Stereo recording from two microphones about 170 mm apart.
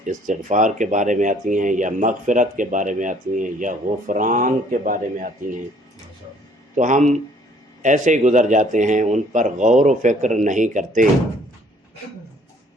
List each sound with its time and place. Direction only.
0.0 s speech: 50° right (ahead or behind)
6.7 s speech: 45° right (ahead or behind)